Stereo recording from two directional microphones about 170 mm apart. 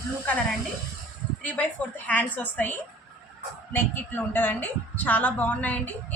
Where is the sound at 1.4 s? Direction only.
10° left (ahead or behind).